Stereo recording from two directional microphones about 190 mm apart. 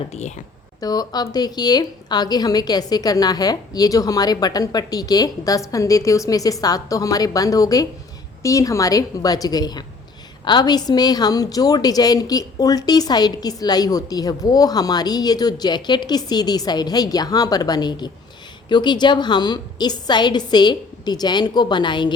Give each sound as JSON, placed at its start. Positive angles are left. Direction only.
{"t": 0.1, "sound": "speech", "side_deg": 35}
{"t": 0.8, "sound": "a woman's voice", "side_deg": 20}